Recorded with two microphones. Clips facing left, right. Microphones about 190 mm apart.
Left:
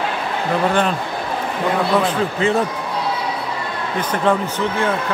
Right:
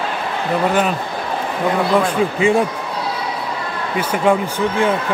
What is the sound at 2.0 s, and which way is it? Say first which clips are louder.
Speech: right 2 dB; 10° right (ahead or behind).